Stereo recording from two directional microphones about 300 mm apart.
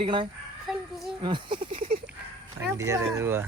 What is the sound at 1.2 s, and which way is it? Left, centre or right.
Speech, centre.